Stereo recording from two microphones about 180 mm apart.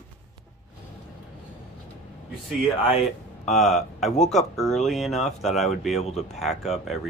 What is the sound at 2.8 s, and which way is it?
Speech, 35° left (ahead or behind).